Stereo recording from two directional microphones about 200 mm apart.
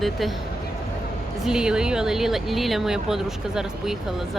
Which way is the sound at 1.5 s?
5° right (ahead or behind).